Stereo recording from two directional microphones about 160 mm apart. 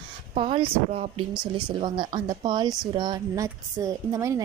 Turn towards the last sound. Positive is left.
turn(degrees=-20)  # may be behind; listen again after turning